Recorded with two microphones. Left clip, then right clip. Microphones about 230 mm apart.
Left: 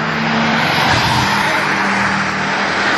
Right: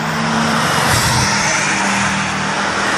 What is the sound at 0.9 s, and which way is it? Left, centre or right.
Vehicle, right.